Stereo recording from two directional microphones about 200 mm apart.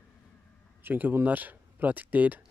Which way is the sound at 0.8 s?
10° right (ahead or behind).